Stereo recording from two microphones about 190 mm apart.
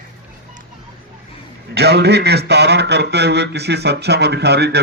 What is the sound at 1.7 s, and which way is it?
A man's voice, 60° right (ahead or behind).